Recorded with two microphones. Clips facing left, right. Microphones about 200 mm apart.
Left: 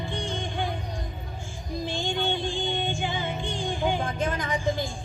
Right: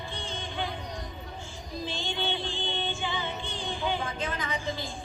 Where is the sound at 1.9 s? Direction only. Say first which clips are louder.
Left 5 dB; 50° left (ahead or behind).